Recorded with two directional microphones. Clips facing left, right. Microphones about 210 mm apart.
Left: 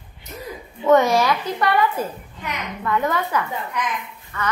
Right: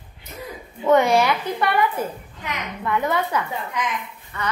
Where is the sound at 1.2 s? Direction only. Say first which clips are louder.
Left 1 dB; 20° right (ahead or behind).